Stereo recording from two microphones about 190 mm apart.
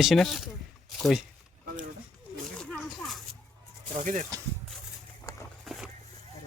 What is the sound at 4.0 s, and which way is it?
Speech, 40° right (ahead or behind).